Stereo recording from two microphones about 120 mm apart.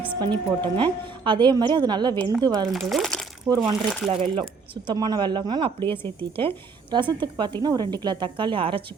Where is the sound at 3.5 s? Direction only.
20° right (ahead or behind).